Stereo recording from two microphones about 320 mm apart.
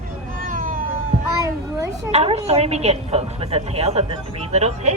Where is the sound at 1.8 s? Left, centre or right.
Centre.